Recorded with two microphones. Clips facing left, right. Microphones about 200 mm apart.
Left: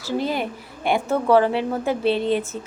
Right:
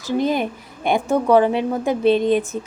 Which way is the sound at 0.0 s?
20° right (ahead or behind).